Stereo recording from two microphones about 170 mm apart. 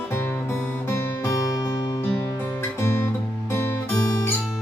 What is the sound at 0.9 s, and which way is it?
Music, 15° left (ahead or behind).